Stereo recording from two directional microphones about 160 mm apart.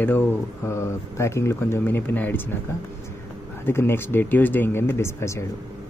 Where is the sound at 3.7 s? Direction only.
15° left (ahead or behind).